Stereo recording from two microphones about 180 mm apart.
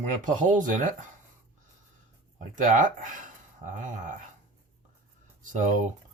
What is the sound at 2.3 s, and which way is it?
Speech, 45° right (ahead or behind).